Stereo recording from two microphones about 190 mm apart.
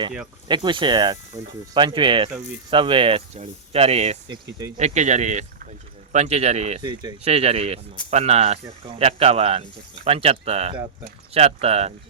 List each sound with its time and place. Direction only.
0.4 s speech: 25° right (ahead or behind)
6.8 s speech: 20° right (ahead or behind)
7.3 s speech: 35° right (ahead or behind)